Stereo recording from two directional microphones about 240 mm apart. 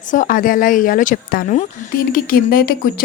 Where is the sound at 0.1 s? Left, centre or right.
Left.